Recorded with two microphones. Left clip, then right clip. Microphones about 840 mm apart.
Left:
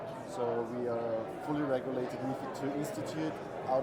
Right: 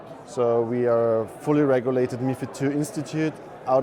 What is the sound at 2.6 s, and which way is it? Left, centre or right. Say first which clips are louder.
Speech: right 12 dB; right.